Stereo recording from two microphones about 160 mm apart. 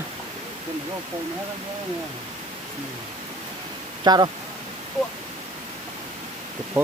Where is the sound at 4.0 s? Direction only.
25° right (ahead or behind).